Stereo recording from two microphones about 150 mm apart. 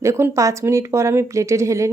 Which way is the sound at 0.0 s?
15° right (ahead or behind).